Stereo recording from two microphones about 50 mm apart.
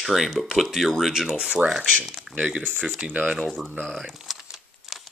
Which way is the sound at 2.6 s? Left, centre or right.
Right.